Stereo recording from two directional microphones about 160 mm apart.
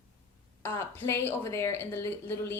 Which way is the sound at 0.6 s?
15° left (ahead or behind).